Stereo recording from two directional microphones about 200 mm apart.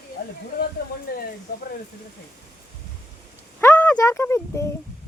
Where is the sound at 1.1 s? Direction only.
50° left (ahead or behind).